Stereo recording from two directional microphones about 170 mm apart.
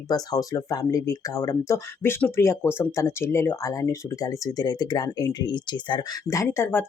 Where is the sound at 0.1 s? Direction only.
20° left (ahead or behind).